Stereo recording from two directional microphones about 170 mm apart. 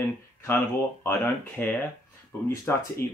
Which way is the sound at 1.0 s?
10° left (ahead or behind).